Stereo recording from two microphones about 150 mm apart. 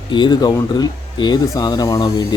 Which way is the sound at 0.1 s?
30° left (ahead or behind).